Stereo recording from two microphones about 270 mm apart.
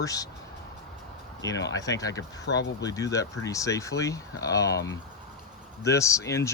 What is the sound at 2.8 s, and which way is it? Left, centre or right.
Speech, centre.